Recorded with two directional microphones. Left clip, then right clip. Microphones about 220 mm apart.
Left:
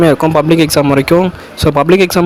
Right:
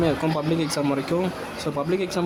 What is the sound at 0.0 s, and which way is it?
Speech, 40° left (ahead or behind).